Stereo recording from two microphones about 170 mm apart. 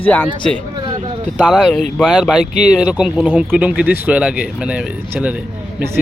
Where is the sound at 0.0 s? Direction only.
10° left (ahead or behind).